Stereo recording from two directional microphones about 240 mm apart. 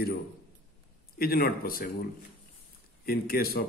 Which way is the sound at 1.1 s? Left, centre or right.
Left.